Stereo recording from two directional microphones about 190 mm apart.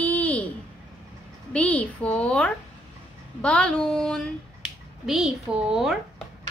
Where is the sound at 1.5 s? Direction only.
5° left (ahead or behind).